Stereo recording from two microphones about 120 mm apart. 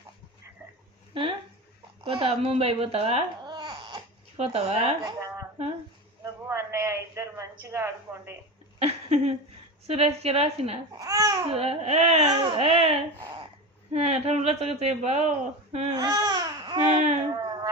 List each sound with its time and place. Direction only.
1.1 s speech: 45° right (ahead or behind)
3.4 s babbling: 40° right (ahead or behind)
4.4 s speech: 60° right (ahead or behind)
5.0 s a sound: 25° right (ahead or behind)
6.2 s a man's voice: 25° right (ahead or behind)
8.8 s a sound: 60° right (ahead or behind)
9.8 s speech: 60° right (ahead or behind)
10.9 s speech: 30° right (ahead or behind)
11.4 s speech: 55° right (ahead or behind)
12.4 s speech: 50° right (ahead or behind)
15.9 s babbling: 35° right (ahead or behind)
16.8 s speech: 75° right (ahead or behind)